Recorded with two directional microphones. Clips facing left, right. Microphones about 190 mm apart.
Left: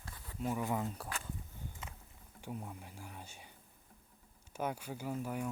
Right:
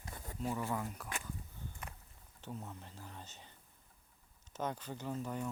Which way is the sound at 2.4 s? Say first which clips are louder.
Left 2 dB; 10° left (ahead or behind).